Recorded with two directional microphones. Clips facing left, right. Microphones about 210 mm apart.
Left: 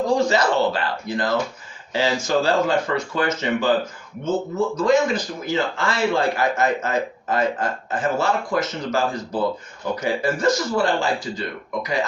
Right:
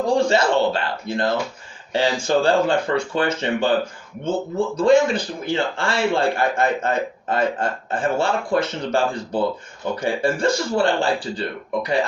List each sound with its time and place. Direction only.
0.2 s a man's voice: 30° right (ahead or behind)
4.8 s a man's voice: 30° right (ahead or behind)